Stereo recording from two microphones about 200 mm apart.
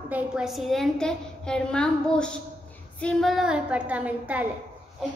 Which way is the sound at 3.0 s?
Centre (ahead or behind).